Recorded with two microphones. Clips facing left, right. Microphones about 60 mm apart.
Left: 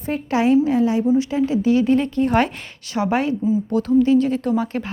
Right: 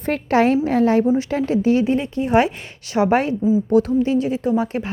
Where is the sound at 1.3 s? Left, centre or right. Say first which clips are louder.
Even; right.